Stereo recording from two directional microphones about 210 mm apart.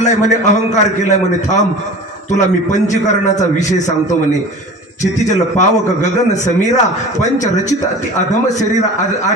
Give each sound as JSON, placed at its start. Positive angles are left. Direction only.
{"t": 0.0, "sound": "a man's voice", "side_deg": 35}